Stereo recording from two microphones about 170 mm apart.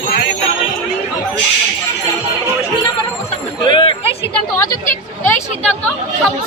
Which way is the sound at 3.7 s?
30° left (ahead or behind).